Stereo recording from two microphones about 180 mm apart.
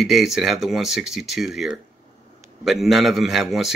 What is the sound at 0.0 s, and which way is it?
A man's voice, centre (ahead or behind).